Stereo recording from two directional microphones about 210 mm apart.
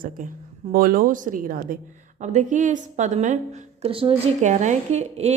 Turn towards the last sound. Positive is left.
turn(degrees=-30)  # may be behind; listen again after turning